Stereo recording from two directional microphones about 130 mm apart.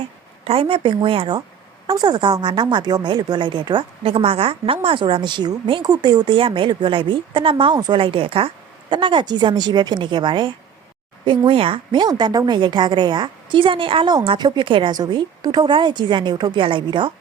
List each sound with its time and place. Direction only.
0.4 s a woman's voice: 45° right (ahead or behind)